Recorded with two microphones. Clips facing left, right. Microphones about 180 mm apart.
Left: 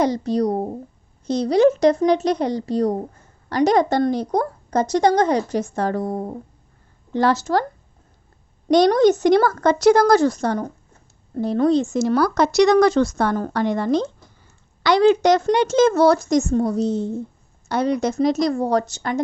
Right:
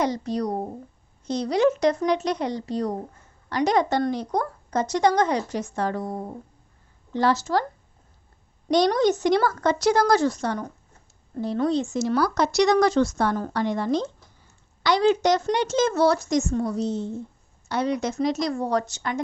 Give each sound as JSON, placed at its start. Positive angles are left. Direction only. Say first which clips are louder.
{"t": 0.0, "sound": "a woman's voice", "louder": "left 6 dB", "side_deg": 30}
{"t": 7.1, "sound": "speech", "louder": "left 3 dB", "side_deg": 55}
{"t": 8.7, "sound": "a woman's voice", "louder": "left 6 dB", "side_deg": 50}